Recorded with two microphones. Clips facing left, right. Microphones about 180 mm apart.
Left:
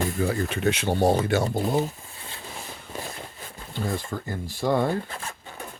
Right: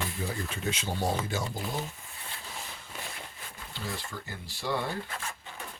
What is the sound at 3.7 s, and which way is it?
Speech, 50° left (ahead or behind).